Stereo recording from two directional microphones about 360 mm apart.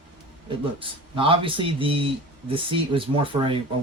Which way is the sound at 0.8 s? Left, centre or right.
Centre.